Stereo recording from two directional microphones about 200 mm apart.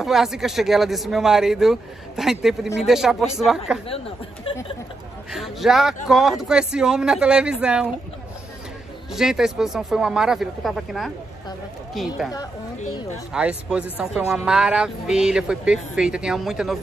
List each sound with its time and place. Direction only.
0.0 s speech: centre (ahead or behind)
4.5 s speech: 25° left (ahead or behind)
5.3 s speech: centre (ahead or behind)
9.1 s speech: centre (ahead or behind)
13.3 s speech: 5° right (ahead or behind)